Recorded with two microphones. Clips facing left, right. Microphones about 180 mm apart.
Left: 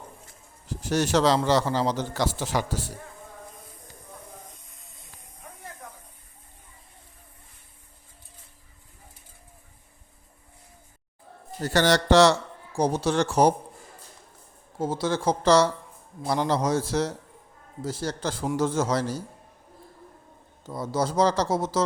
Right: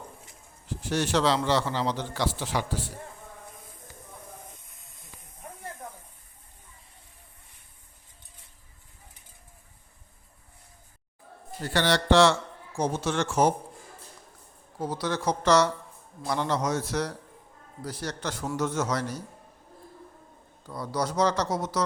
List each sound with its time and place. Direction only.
0.7 s a man's voice: 40° left (ahead or behind)
4.8 s hiss: centre (ahead or behind)
11.6 s a man's voice: 40° left (ahead or behind)
14.8 s a man's voice: 25° left (ahead or behind)
20.7 s speech: 25° left (ahead or behind)